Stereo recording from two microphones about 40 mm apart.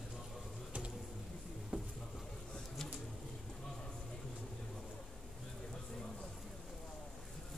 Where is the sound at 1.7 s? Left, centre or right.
Right.